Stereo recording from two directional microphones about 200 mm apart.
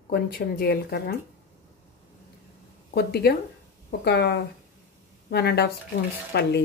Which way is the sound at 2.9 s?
55° left (ahead or behind).